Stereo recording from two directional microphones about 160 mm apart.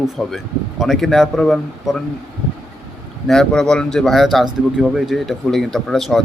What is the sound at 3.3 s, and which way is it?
Speech, 5° left (ahead or behind).